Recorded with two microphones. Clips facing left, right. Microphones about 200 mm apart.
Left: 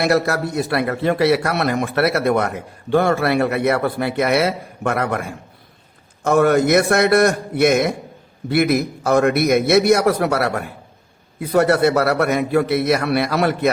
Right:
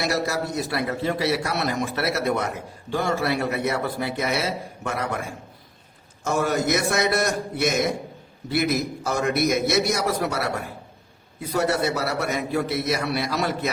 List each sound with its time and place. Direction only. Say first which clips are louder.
0.0 s a man's voice: left 7 dB; 60° left (ahead or behind)
6.2 s a man's voice: left 8 dB; 60° left (ahead or behind)